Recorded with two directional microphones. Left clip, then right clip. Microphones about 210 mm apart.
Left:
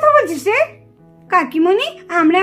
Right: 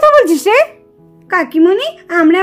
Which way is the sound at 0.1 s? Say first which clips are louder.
Right 5 dB; 40° right (ahead or behind).